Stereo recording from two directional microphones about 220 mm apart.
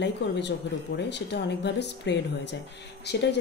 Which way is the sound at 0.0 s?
50° left (ahead or behind).